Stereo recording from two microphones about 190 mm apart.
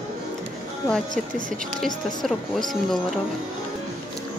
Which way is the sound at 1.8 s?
Centre (ahead or behind).